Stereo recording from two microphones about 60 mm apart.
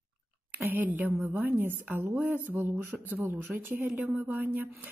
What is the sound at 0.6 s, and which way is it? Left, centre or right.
A woman's voice, right.